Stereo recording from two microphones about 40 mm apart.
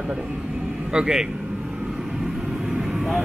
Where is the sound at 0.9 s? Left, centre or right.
Right.